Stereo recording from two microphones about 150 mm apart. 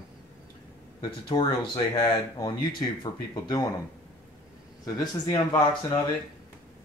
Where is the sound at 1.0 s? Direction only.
30° left (ahead or behind).